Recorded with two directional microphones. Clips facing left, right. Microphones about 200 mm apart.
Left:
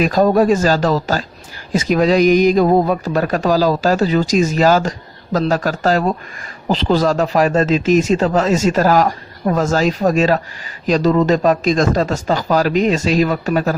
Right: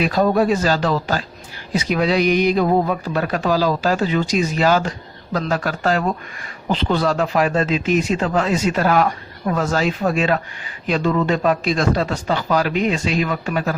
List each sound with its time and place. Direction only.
0.0 s speech: 45° left (ahead or behind)